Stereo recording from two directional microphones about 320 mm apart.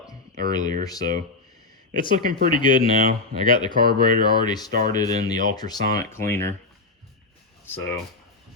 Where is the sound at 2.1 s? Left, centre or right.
Right.